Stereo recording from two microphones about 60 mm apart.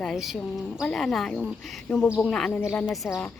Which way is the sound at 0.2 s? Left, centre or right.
Centre.